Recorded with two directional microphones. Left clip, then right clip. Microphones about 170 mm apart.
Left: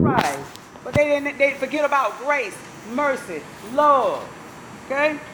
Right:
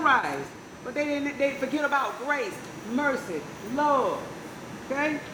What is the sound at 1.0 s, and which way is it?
A woman's voice, 20° right (ahead or behind).